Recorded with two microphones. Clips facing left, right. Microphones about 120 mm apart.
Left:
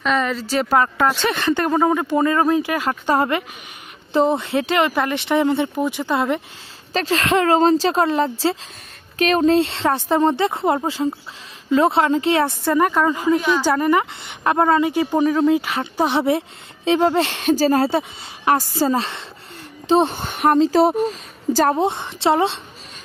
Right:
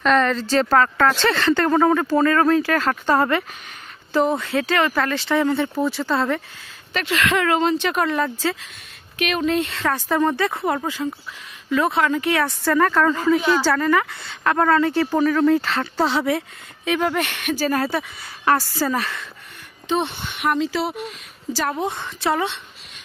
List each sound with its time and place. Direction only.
0.0 s a woman's voice: 5° left (ahead or behind)
6.9 s speech: 35° left (ahead or behind)
9.2 s speech: 35° left (ahead or behind)
19.9 s speech: 40° left (ahead or behind)
21.8 s speech: 25° left (ahead or behind)